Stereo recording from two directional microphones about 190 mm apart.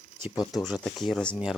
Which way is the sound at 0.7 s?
Centre (ahead or behind).